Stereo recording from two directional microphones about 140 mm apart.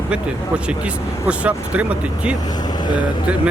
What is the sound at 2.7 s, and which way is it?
Vehicle, 30° left (ahead or behind).